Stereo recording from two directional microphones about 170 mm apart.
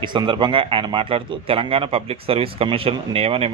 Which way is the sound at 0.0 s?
25° right (ahead or behind).